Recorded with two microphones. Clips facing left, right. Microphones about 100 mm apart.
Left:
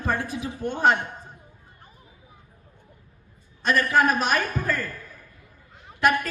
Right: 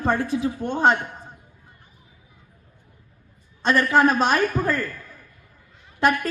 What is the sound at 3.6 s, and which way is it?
A man's voice, 25° right (ahead or behind).